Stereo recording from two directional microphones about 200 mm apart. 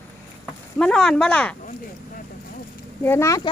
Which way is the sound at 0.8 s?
5° left (ahead or behind).